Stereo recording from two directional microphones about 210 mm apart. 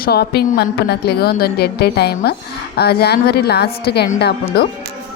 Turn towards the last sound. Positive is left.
turn(degrees=50)  # may be behind; listen again after turning